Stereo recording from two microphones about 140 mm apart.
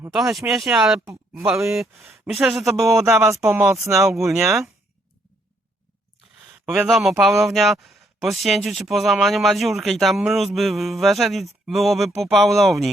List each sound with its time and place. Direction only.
0.3 s speech: centre (ahead or behind)
1.4 s speech: 20° right (ahead or behind)
1.7 s a woman's voice: centre (ahead or behind)
2.8 s speech: 20° right (ahead or behind)
3.5 s speech: 10° right (ahead or behind)
3.8 s speech: 20° right (ahead or behind)
4.3 s speech: centre (ahead or behind)
6.8 s speech: centre (ahead or behind)